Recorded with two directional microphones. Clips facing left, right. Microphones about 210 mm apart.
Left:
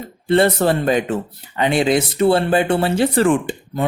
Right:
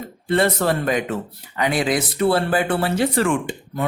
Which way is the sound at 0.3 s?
30° left (ahead or behind).